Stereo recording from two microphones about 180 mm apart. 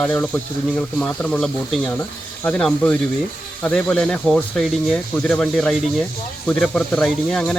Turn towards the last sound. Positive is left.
turn(degrees=5)  # may be behind; listen again after turning